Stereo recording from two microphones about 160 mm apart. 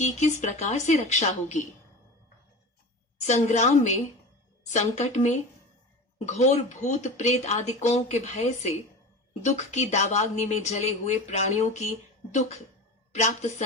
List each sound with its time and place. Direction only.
0.0 s speech: 45° left (ahead or behind)
3.2 s speech: 45° left (ahead or behind)